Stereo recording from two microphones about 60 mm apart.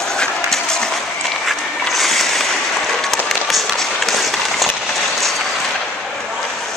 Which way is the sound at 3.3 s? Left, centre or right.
Centre.